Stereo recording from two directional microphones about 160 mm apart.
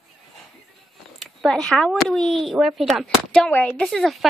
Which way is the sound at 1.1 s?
5° left (ahead or behind).